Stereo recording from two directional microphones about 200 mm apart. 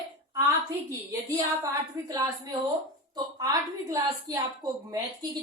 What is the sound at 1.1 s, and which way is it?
Speech, 15° right (ahead or behind).